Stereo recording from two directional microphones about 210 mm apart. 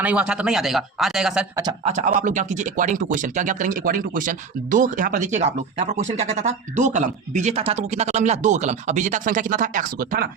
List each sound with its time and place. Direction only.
0.0 s speech: 5° right (ahead or behind)
1.8 s speech: 35° right (ahead or behind)